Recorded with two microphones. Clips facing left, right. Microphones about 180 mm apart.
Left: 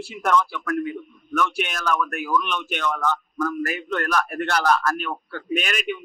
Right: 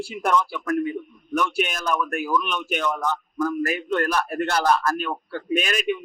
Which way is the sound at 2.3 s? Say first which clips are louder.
Left 2 dB; 5° right (ahead or behind).